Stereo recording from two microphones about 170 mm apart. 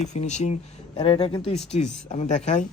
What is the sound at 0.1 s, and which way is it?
Speech, 40° left (ahead or behind).